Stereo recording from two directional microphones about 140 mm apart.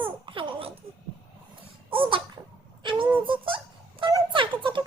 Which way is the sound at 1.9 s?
40° right (ahead or behind).